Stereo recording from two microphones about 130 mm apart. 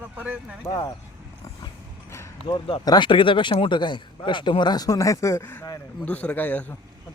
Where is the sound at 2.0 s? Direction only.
20° left (ahead or behind).